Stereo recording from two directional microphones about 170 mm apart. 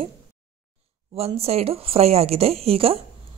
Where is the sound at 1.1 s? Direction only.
35° right (ahead or behind).